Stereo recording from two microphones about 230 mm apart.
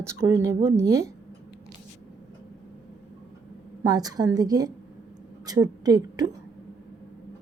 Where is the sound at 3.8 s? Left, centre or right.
Centre.